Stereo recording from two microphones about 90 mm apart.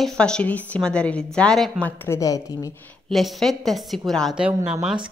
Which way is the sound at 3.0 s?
Centre (ahead or behind).